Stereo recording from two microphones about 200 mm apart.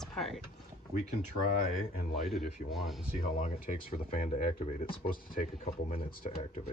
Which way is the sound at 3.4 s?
40° left (ahead or behind).